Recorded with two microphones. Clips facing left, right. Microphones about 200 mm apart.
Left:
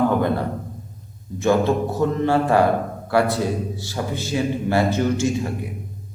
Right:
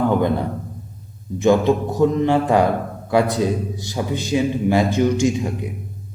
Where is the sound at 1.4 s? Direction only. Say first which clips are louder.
Right 3 dB; 15° right (ahead or behind).